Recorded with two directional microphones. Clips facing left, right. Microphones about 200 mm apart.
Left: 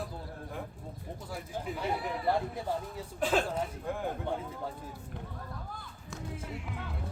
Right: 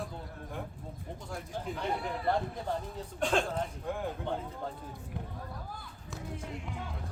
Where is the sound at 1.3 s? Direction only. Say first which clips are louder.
Left 1 dB; 5° left (ahead or behind).